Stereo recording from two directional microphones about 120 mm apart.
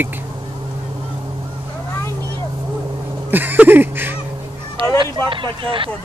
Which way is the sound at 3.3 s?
15° right (ahead or behind).